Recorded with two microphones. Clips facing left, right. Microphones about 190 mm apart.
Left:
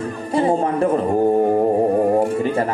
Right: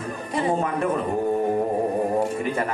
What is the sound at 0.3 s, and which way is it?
Speech, 30° left (ahead or behind).